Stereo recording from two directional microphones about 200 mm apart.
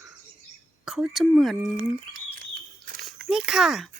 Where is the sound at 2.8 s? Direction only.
45° right (ahead or behind).